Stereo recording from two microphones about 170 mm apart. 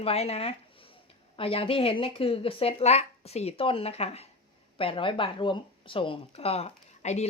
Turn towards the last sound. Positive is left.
turn(degrees=40)  # may be behind; listen again after turning